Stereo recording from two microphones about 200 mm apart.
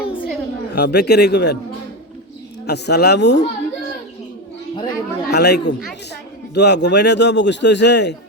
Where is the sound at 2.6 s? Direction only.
55° left (ahead or behind).